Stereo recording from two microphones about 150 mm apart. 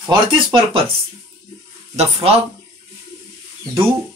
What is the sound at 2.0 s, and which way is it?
Speech, 40° right (ahead or behind).